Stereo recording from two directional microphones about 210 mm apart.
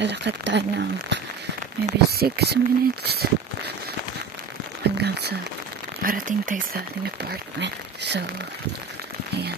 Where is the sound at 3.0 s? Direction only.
50° right (ahead or behind).